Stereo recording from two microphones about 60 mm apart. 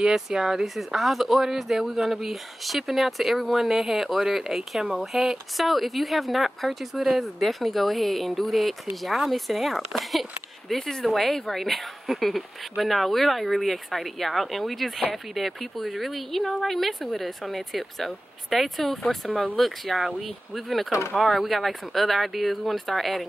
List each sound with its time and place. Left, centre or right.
0.0 s speech: centre